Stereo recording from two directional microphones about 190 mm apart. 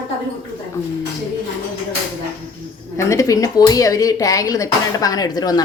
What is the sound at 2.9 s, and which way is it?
Speech, 15° left (ahead or behind).